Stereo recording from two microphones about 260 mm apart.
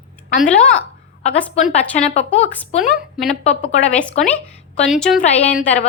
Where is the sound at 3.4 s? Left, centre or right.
Left.